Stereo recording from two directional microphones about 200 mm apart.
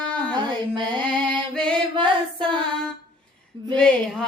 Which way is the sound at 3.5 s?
25° right (ahead or behind).